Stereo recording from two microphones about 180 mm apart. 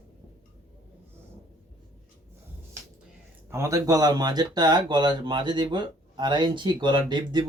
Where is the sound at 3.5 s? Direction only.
15° right (ahead or behind).